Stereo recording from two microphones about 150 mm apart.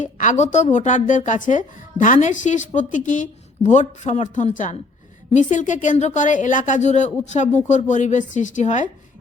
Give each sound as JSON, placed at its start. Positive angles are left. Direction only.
{"t": 0.0, "sound": "speech", "side_deg": 55}